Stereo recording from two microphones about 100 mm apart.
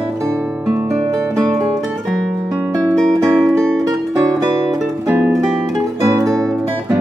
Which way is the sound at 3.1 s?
30° right (ahead or behind).